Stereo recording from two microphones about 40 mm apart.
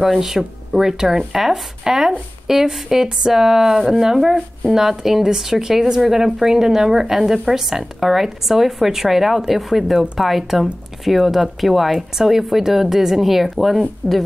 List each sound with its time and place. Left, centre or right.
0.0 s speech: centre